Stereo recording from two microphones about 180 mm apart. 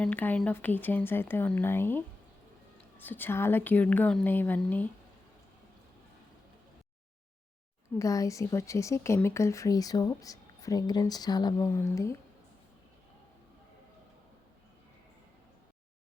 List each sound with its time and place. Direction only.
0.0 s speech: 10° left (ahead or behind)
3.0 s speech: 10° left (ahead or behind)
7.9 s a woman's voice: 20° left (ahead or behind)